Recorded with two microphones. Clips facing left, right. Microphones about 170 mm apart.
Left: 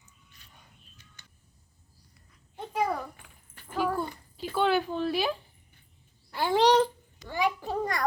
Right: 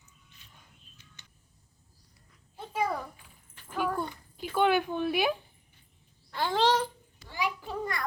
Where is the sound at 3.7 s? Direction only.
5° left (ahead or behind).